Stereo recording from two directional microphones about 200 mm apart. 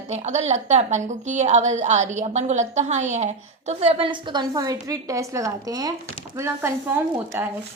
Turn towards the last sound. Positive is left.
turn(degrees=-10)  # may be behind; listen again after turning